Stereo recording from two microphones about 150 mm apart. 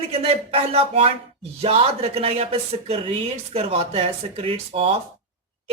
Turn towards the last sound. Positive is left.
turn(degrees=-40)  # may be behind; listen again after turning